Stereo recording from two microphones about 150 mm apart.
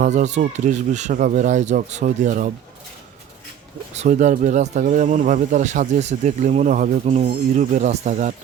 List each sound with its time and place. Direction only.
0.0 s speech: 55° right (ahead or behind)
3.9 s speech: 50° right (ahead or behind)